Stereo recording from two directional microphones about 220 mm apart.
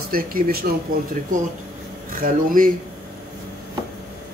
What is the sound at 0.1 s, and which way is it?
Speech, 40° right (ahead or behind).